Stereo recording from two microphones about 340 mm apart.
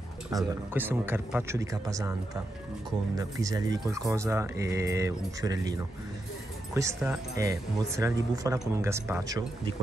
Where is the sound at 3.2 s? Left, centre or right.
Centre.